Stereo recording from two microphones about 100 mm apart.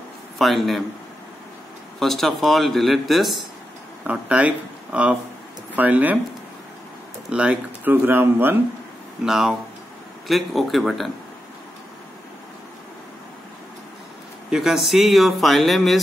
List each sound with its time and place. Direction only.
0.4 s a man's voice: centre (ahead or behind)
2.0 s a man's voice: 5° left (ahead or behind)
4.0 s speech: 15° right (ahead or behind)
7.2 s speech: 10° right (ahead or behind)
9.2 s a man's voice: 5° right (ahead or behind)
14.5 s a man's voice: 5° right (ahead or behind)